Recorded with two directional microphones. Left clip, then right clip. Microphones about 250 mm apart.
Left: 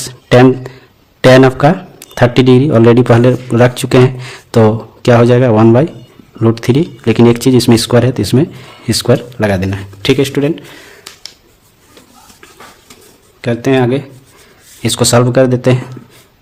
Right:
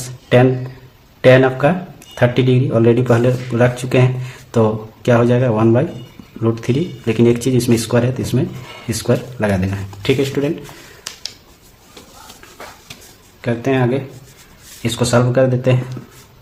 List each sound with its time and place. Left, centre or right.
0.3 s speech: left
13.4 s speech: left